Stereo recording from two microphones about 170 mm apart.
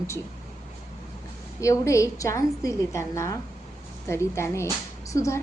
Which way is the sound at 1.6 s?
20° left (ahead or behind).